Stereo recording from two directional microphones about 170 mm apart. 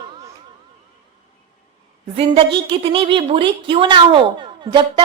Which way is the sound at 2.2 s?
30° right (ahead or behind).